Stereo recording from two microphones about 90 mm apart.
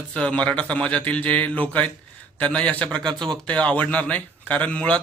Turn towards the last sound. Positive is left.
turn(degrees=15)  # may be behind; listen again after turning